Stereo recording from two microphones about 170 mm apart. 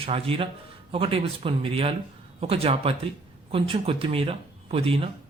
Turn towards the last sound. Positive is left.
turn(degrees=-35)  # may be behind; listen again after turning